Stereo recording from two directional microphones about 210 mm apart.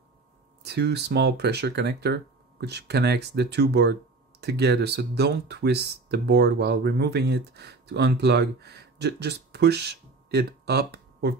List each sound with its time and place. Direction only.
0.7 s speech: 50° right (ahead or behind)